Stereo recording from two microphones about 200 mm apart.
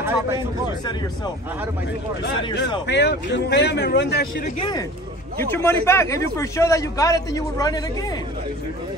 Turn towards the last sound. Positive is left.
turn(degrees=20)  # may be behind; listen again after turning